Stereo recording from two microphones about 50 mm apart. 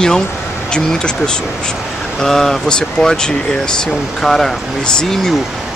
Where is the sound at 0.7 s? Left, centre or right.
Centre.